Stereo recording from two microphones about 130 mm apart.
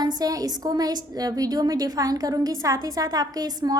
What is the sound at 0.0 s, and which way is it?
A woman's voice, 30° right (ahead or behind).